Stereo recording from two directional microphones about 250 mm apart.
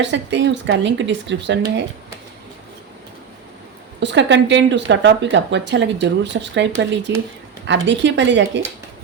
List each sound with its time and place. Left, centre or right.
0.0 s a woman's voice: right
4.0 s a woman's voice: right